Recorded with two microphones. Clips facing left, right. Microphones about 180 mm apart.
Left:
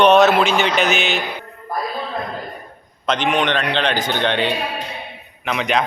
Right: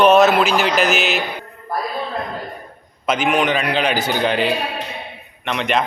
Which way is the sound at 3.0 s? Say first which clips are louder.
Right 1 dB; 5° right (ahead or behind).